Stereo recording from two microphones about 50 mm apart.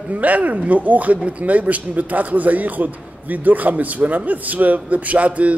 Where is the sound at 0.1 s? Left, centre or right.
Right.